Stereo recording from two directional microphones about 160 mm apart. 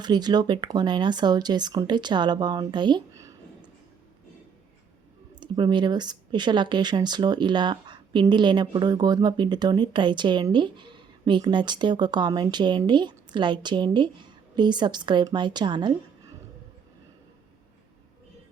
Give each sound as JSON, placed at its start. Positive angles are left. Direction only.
{"t": 0.0, "sound": "speech", "side_deg": -25}
{"t": 5.3, "sound": "speech", "side_deg": -30}